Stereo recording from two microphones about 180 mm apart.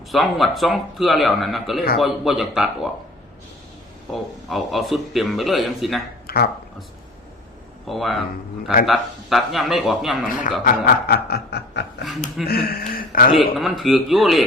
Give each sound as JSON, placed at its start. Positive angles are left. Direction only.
{"t": 0.1, "sound": "speech", "side_deg": 0}
{"t": 4.1, "sound": "speech", "side_deg": 0}
{"t": 6.2, "sound": "a sound", "side_deg": 60}
{"t": 7.9, "sound": "speech", "side_deg": 0}
{"t": 10.6, "sound": "chuckle", "side_deg": 55}
{"t": 12.0, "sound": "speech", "side_deg": 0}
{"t": 12.5, "sound": "chuckle", "side_deg": 60}
{"t": 13.6, "sound": "speech", "side_deg": 0}